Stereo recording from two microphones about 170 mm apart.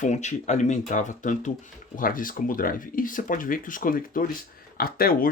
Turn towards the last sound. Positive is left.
turn(degrees=60)  # may be behind; listen again after turning